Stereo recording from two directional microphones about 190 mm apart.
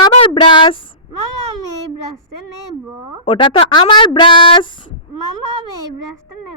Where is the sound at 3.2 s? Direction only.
25° left (ahead or behind).